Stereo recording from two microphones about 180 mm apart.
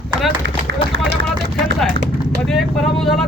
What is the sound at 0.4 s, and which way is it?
Run, 90° right.